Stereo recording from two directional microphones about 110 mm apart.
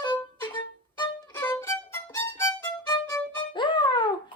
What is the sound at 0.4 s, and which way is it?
Music, 45° left (ahead or behind).